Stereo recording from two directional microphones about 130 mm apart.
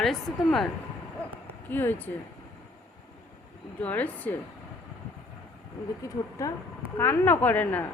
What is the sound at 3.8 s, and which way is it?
Speech, 10° left (ahead or behind).